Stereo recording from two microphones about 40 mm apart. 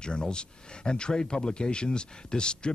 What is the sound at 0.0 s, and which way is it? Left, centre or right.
Speech, centre.